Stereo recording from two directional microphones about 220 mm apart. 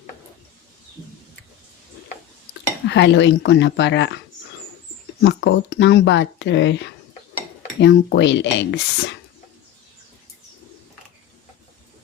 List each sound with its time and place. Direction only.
2.8 s speech: 55° left (ahead or behind)
5.2 s speech: 50° left (ahead or behind)